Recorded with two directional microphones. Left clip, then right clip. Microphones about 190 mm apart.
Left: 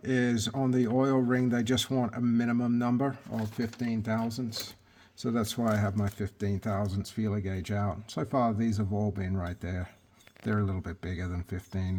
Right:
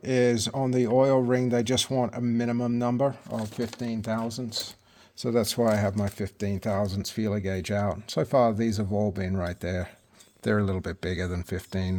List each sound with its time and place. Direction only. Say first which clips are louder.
0.0 s speech: right 6 dB; 30° right (ahead or behind)